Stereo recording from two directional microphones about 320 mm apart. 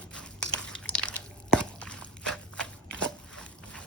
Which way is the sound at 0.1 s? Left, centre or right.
Centre.